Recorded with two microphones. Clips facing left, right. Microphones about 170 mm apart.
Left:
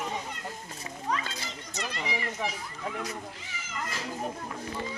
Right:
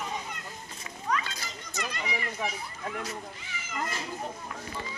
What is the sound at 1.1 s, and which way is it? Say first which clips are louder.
Children playing: right 1 dB; 30° left (ahead or behind).